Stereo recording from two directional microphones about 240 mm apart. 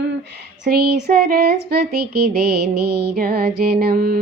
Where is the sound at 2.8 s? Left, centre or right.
Right.